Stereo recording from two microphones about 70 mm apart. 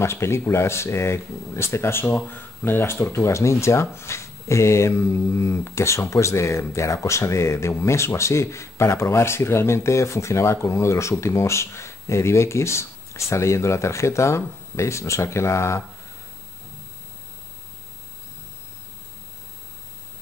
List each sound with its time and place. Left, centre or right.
0.0 s speech: left